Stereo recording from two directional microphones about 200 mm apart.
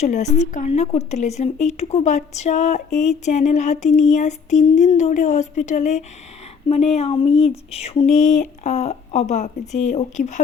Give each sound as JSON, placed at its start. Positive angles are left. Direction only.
{"t": 0.0, "sound": "speech", "side_deg": 35}